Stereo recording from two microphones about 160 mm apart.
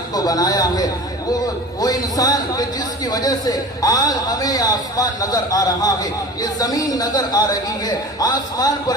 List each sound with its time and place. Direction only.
0.1 s a man's voice: 25° left (ahead or behind)